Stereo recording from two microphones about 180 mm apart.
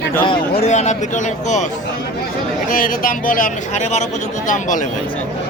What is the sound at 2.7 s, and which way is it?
Speech, 50° left (ahead or behind).